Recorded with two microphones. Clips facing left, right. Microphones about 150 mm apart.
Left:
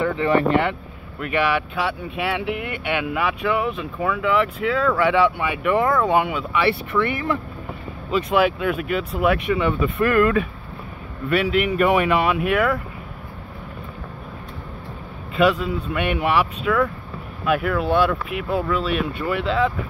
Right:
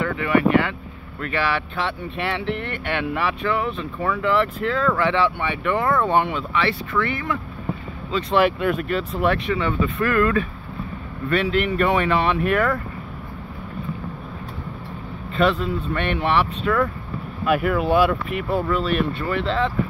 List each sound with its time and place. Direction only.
0.0 s vehicle: 20° left (ahead or behind)
0.4 s speech: 25° left (ahead or behind)
1.2 s speech: 15° left (ahead or behind)
8.3 s speech: 5° left (ahead or behind)
15.3 s speech: 5° left (ahead or behind)